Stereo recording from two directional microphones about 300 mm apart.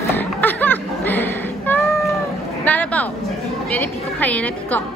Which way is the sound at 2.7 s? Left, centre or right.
Centre.